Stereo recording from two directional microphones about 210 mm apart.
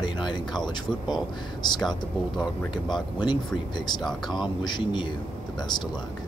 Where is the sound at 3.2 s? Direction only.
20° left (ahead or behind).